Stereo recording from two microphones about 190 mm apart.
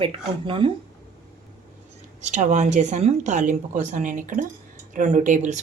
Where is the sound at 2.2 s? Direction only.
40° right (ahead or behind).